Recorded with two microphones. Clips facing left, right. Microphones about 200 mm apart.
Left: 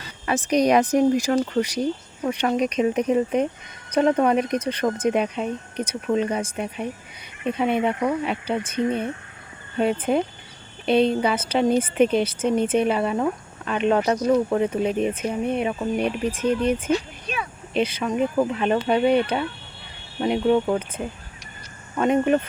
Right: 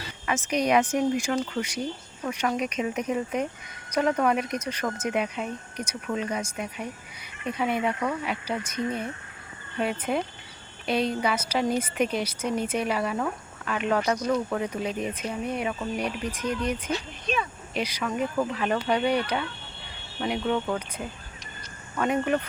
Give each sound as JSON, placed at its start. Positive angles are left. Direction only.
{"t": 0.3, "sound": "speech", "side_deg": 35}
{"t": 17.2, "sound": "a sound", "side_deg": 10}
{"t": 17.7, "sound": "speech", "side_deg": 25}